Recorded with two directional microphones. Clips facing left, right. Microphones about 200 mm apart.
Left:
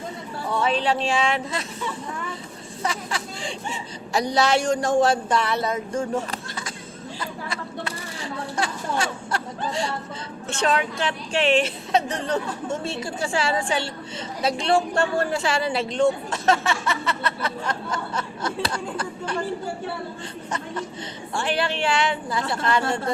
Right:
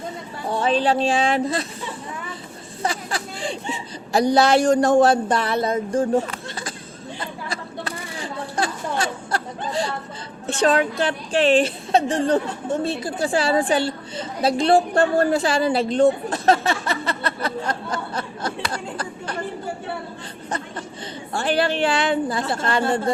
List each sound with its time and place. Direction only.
0.5 s a woman's voice: 30° right (ahead or behind)
2.8 s a sound: 35° right (ahead or behind)
4.2 s a woman's voice: 55° right (ahead or behind)
4.5 s a woman's voice: 35° right (ahead or behind)
7.2 s a sound: 35° right (ahead or behind)
10.4 s a woman's voice: 35° right (ahead or behind)
21.3 s a woman's voice: 40° right (ahead or behind)